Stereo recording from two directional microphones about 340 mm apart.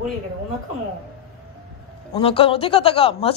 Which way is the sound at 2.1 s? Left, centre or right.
Centre.